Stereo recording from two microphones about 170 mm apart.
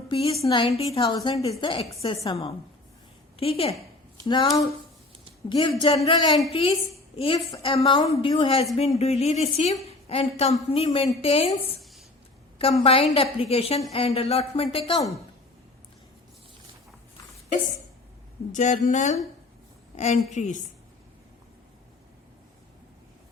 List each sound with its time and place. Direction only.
0.1 s a woman's voice: 35° left (ahead or behind)
4.3 s a woman's voice: 25° left (ahead or behind)
18.5 s speech: 45° left (ahead or behind)
20.3 s speech: 45° left (ahead or behind)